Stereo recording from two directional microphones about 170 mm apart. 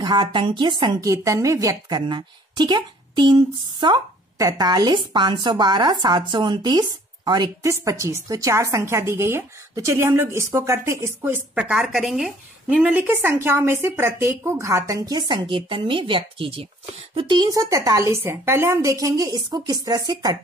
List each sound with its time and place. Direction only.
0.0 s a woman's voice: 25° right (ahead or behind)